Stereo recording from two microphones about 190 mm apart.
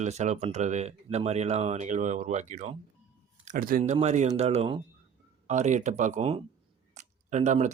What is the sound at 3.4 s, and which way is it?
Speech, 45° right (ahead or behind).